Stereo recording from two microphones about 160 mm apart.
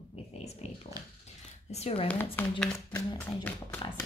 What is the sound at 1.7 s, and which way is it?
Speech, 40° left (ahead or behind).